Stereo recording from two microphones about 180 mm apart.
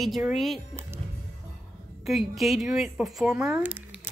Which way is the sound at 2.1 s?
Centre (ahead or behind).